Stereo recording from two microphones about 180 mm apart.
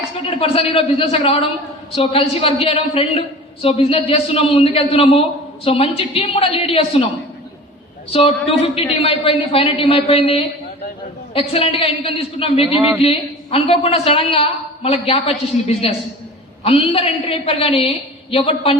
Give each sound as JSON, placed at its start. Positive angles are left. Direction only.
{"t": 0.3, "sound": "a man's voice", "side_deg": 35}
{"t": 8.1, "sound": "a man's voice", "side_deg": 30}